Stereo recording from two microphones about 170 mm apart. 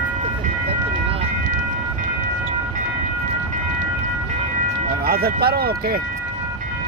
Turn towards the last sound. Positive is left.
turn(degrees=-65)  # may be behind; listen again after turning